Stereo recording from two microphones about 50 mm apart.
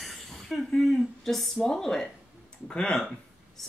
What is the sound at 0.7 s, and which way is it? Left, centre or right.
Speech, centre.